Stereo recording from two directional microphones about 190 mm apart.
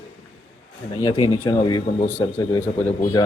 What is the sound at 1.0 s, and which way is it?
Speech, 15° left (ahead or behind).